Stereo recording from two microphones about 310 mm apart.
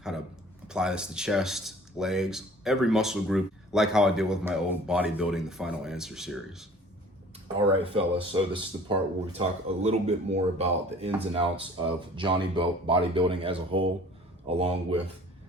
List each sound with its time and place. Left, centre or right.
0.7 s speech: centre
7.6 s speech: centre